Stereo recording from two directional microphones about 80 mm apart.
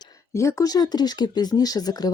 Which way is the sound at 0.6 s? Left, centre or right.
Left.